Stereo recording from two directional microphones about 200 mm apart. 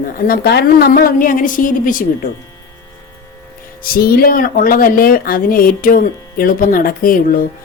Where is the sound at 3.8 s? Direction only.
50° left (ahead or behind).